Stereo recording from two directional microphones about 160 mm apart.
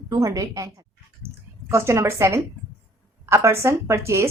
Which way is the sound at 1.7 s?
15° right (ahead or behind).